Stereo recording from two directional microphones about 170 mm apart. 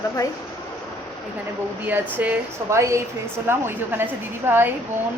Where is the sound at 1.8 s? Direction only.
10° right (ahead or behind).